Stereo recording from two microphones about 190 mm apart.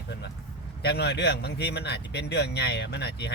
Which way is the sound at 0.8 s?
60° left (ahead or behind).